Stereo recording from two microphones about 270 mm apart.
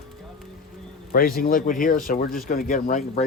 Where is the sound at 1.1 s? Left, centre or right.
Left.